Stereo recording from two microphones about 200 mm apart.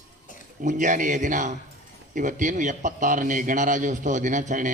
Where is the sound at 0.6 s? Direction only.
40° right (ahead or behind).